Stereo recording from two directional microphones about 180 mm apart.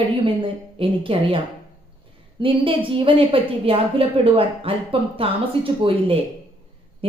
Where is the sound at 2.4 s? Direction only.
30° right (ahead or behind).